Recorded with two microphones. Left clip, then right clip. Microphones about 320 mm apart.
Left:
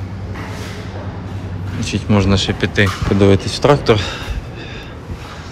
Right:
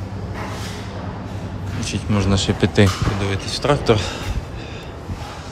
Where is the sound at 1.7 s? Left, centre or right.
Centre.